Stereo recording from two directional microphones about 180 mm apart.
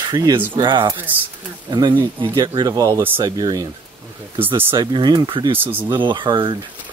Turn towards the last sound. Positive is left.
turn(degrees=-25)  # may be behind; listen again after turning